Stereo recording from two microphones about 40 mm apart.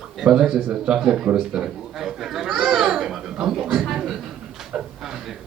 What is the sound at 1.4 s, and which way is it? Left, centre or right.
Speech, centre.